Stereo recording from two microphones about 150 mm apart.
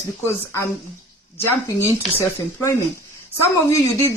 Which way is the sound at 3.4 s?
15° left (ahead or behind).